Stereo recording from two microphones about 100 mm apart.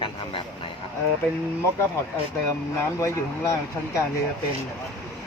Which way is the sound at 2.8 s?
30° left (ahead or behind).